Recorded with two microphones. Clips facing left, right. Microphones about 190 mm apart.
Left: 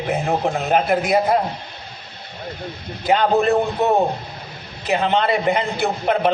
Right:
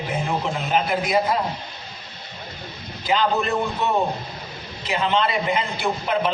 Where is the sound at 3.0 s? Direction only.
50° left (ahead or behind).